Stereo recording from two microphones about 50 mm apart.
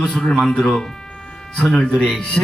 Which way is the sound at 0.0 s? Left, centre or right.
Centre.